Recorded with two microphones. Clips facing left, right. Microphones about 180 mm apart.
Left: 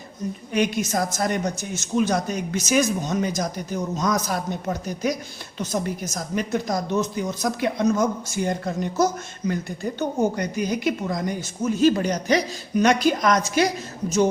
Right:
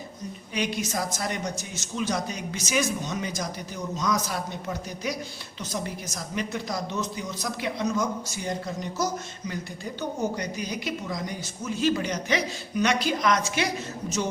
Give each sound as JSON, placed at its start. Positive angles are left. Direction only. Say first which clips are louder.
{"t": 0.5, "sound": "a woman's voice", "louder": "left 6 dB", "side_deg": 50}